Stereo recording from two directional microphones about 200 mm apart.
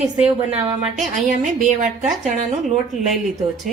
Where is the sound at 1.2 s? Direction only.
40° right (ahead or behind).